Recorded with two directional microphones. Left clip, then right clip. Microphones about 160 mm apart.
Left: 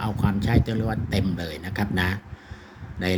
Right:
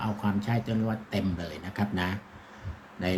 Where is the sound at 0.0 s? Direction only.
50° left (ahead or behind).